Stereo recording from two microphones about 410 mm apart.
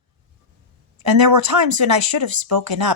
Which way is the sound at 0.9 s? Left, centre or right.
Right.